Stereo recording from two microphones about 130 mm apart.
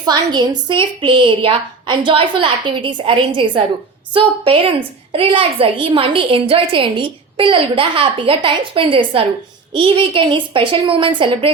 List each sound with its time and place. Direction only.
0.0 s a woman's voice: 35° right (ahead or behind)